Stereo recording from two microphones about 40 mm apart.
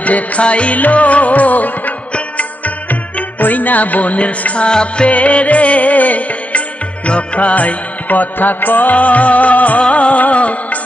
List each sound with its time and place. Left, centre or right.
0.0 s music: left
2.9 s music: left
4.6 s music: left
5.1 s music: left
8.9 s music: left